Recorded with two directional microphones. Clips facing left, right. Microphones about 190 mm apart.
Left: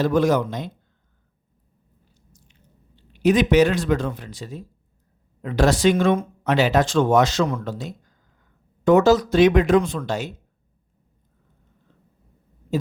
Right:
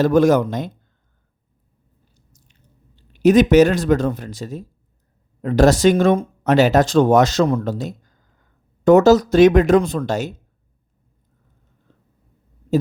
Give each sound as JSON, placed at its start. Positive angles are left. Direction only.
{"t": 0.0, "sound": "speech", "side_deg": -45}
{"t": 2.3, "sound": "chewing", "side_deg": -40}
{"t": 5.4, "sound": "speech", "side_deg": -45}